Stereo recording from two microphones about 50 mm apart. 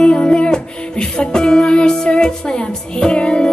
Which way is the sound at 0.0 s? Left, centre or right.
Centre.